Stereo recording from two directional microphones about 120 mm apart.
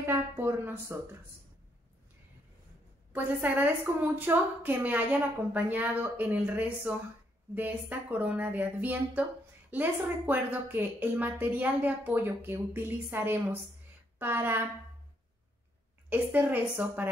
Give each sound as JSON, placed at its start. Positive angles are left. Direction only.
{"t": 0.0, "sound": "a sound", "side_deg": -15}
{"t": 3.1, "sound": "a woman's voice", "side_deg": -15}
{"t": 16.1, "sound": "a woman's voice", "side_deg": -15}